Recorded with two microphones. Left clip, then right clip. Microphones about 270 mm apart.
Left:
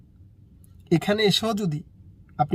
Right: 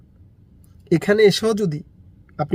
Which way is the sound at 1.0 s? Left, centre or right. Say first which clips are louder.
Right 8 dB; centre.